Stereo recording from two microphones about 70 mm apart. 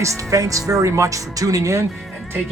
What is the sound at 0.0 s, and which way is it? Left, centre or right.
Speech, right.